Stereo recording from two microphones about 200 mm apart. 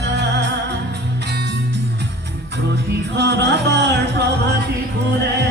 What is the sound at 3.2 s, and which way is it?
Music, 60° right (ahead or behind).